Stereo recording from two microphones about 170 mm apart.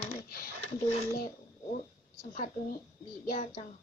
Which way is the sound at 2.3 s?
50° left (ahead or behind).